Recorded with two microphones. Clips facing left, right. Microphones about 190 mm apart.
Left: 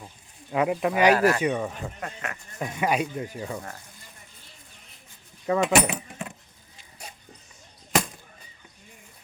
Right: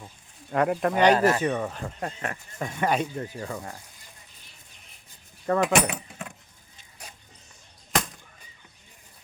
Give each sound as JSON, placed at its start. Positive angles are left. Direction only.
{"t": 0.5, "sound": "speech", "side_deg": 5}
{"t": 2.0, "sound": "speech", "side_deg": -35}
{"t": 2.6, "sound": "speech", "side_deg": 5}
{"t": 5.5, "sound": "speech", "side_deg": 0}